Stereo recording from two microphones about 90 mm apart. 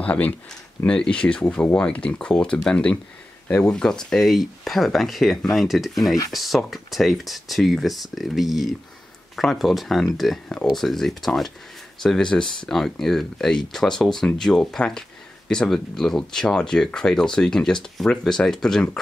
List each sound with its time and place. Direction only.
0.0 s speech: 15° left (ahead or behind)